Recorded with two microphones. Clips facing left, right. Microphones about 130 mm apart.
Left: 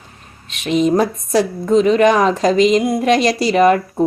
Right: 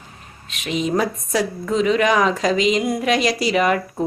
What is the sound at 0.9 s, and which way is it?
Speech, 30° left (ahead or behind).